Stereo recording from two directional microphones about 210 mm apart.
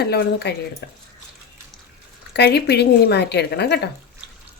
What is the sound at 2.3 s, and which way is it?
Speech, 50° left (ahead or behind).